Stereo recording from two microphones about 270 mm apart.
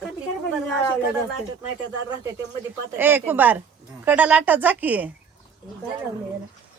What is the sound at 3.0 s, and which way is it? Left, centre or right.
Speech, centre.